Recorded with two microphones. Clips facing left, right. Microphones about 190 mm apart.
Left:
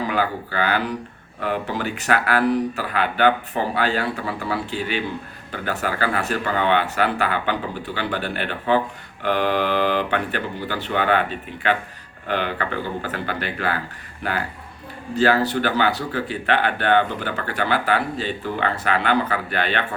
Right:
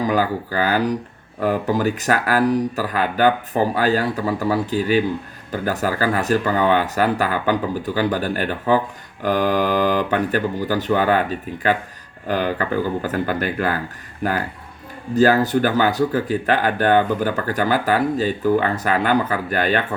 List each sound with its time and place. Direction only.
0.0 s speech: 40° right (ahead or behind)